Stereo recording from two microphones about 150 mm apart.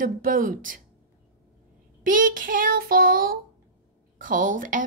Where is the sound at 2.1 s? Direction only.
65° right (ahead or behind).